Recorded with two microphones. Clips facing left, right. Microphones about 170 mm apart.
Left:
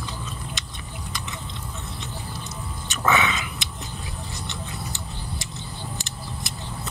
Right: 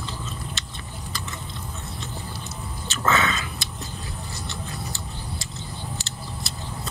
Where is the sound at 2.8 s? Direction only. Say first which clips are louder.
Left 1 dB; 15° left (ahead or behind).